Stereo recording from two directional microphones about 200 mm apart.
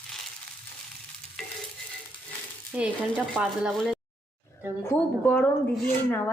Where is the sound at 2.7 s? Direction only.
5° right (ahead or behind); by 6.2 s 10° left (ahead or behind).